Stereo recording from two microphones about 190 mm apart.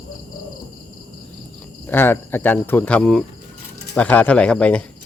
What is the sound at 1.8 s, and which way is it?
Speech, 10° left (ahead or behind).